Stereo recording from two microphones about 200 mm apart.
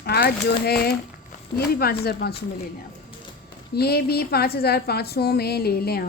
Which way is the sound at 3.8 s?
55° left (ahead or behind).